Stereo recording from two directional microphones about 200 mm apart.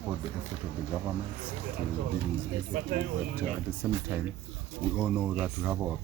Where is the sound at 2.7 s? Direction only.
40° right (ahead or behind).